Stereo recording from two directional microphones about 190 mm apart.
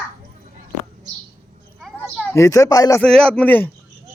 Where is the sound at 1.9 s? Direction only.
10° left (ahead or behind).